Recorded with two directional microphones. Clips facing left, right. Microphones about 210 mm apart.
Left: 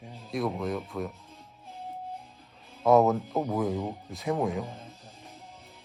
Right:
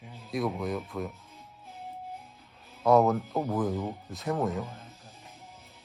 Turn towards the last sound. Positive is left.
turn(degrees=0)  # may be behind; listen again after turning